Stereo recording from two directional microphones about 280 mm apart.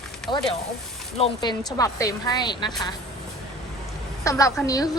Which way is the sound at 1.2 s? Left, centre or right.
Centre.